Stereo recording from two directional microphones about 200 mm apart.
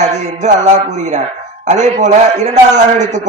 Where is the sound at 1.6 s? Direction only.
35° right (ahead or behind).